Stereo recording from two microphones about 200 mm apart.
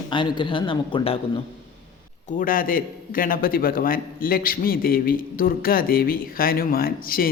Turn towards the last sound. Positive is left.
turn(degrees=45)  # may be behind; listen again after turning